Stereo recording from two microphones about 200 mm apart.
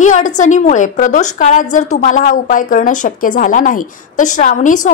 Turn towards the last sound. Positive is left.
turn(degrees=40)  # may be behind; listen again after turning